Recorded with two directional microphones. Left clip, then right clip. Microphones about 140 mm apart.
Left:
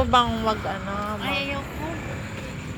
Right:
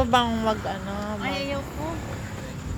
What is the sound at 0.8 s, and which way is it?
Speech, centre (ahead or behind).